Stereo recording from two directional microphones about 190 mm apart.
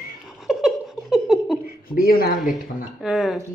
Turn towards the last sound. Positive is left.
turn(degrees=0)  # may be behind; listen again after turning